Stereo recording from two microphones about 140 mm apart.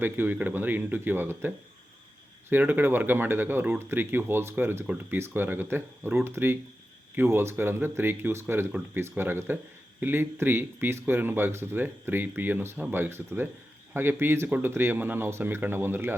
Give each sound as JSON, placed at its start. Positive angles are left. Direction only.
{"t": 0.0, "sound": "speech", "side_deg": -15}